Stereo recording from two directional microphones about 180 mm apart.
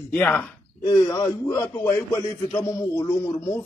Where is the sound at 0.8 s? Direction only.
20° left (ahead or behind).